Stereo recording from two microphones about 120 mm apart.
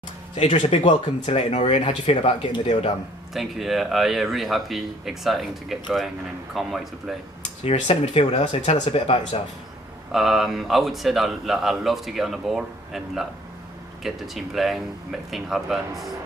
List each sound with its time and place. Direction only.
0.5 s speech: 50° left (ahead or behind)
3.3 s speech: centre (ahead or behind)
7.6 s speech: 65° left (ahead or behind)
8.9 s speech: 55° left (ahead or behind)
10.1 s speech: centre (ahead or behind)